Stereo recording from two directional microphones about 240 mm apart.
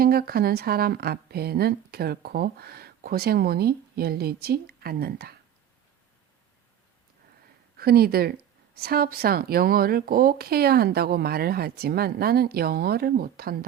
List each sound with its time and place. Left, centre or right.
0.0 s speech: right
7.8 s speech: right